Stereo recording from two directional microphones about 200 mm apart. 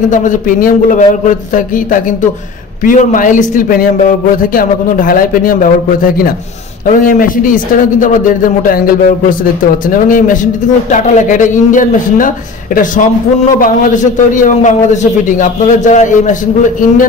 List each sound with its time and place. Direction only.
0.1 s a man's voice: 40° left (ahead or behind)
2.8 s a man's voice: 40° left (ahead or behind)
13.6 s a man's voice: 40° left (ahead or behind)